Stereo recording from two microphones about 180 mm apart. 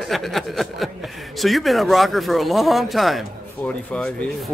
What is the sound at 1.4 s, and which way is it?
Speech, centre (ahead or behind).